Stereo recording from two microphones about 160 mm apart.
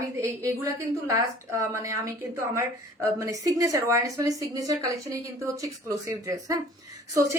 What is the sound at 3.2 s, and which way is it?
A woman's voice, 20° right (ahead or behind).